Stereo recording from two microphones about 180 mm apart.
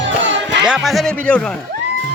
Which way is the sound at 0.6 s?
Centre (ahead or behind).